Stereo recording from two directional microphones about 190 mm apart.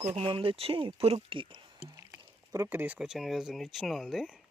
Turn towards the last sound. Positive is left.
turn(degrees=0)  # may be behind; listen again after turning